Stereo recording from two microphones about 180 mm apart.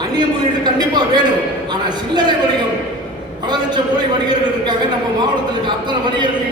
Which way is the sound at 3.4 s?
25° right (ahead or behind).